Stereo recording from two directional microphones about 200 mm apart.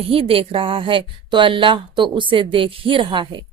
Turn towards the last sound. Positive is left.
turn(degrees=-25)  # may be behind; listen again after turning